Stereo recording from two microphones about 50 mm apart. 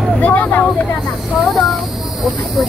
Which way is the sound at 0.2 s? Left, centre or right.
Left.